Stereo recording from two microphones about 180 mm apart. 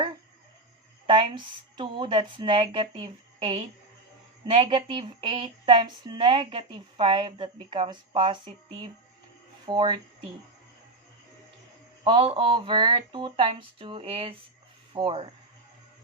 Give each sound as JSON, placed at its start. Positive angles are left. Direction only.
{"t": 1.0, "sound": "speech", "side_deg": -30}
{"t": 12.0, "sound": "speech", "side_deg": -30}